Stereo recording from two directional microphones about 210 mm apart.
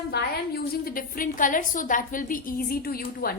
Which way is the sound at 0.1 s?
50° left (ahead or behind).